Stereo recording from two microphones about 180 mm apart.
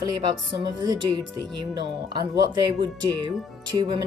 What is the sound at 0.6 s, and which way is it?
A woman's voice, 25° right (ahead or behind).